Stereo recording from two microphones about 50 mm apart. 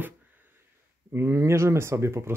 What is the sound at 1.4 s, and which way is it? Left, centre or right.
Speech, right.